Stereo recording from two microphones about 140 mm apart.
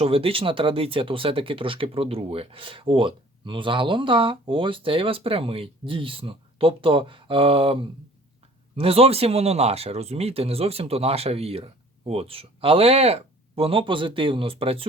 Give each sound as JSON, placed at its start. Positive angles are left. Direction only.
{"t": 0.0, "sound": "speech", "side_deg": -40}